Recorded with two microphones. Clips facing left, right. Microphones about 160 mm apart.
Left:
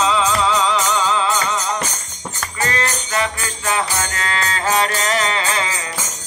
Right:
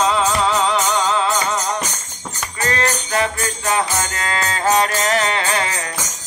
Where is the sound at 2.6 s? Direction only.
45° right (ahead or behind).